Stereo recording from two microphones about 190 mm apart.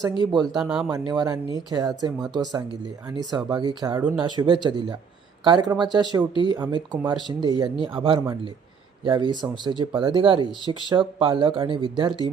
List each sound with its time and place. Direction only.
0.3 s speech: 20° right (ahead or behind)
0.5 s speech: centre (ahead or behind)
0.9 s speech: 20° right (ahead or behind)
3.9 s speech: 10° right (ahead or behind)
4.2 s speech: 25° right (ahead or behind)